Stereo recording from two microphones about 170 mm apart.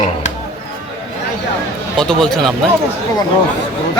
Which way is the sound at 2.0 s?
5° left (ahead or behind).